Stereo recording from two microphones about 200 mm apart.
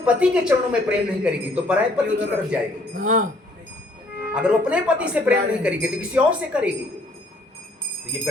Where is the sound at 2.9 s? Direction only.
45° right (ahead or behind).